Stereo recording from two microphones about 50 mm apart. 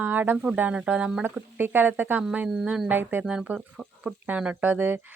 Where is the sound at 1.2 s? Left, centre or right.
Right.